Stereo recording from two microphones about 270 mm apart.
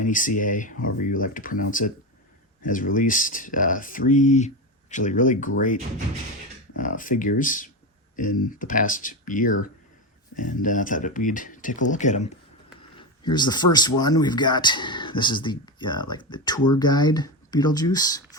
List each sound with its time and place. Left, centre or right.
0.0 s speech: left
6.7 s speech: left
13.0 s speech: centre